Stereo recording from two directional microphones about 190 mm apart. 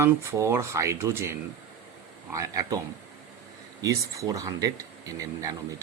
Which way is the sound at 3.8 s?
20° right (ahead or behind).